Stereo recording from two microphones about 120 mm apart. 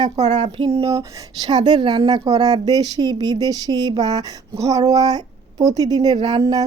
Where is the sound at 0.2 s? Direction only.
70° right (ahead or behind).